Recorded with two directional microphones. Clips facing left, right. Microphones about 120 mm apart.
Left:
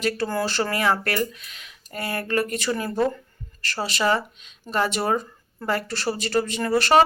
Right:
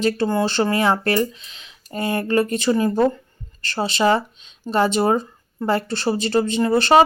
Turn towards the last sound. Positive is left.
turn(degrees=-25)  # may be behind; listen again after turning